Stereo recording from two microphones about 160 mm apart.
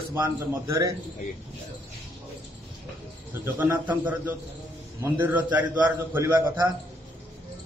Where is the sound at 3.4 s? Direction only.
10° right (ahead or behind).